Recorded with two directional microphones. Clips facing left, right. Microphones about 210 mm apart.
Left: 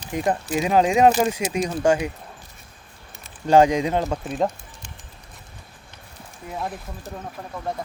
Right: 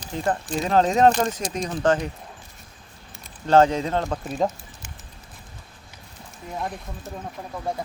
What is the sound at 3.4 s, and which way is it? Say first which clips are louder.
Speech: left 2 dB; 15° left (ahead or behind).